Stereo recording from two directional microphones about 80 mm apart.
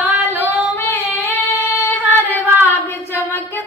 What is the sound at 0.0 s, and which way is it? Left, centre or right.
Female singing, right.